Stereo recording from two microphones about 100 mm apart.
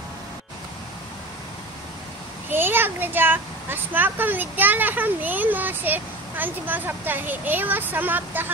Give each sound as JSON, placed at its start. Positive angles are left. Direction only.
{"t": 2.5, "sound": "a child's voice", "side_deg": -20}